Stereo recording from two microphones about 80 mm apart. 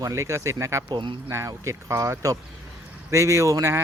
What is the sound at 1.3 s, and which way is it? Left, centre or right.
A man's voice, right.